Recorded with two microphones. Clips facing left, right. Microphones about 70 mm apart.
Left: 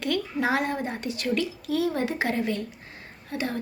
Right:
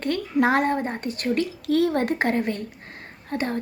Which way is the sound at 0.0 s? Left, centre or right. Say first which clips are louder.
Right 4 dB; right.